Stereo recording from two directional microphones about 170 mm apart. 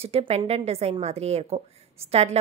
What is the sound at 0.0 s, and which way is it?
A woman's voice, 35° right (ahead or behind).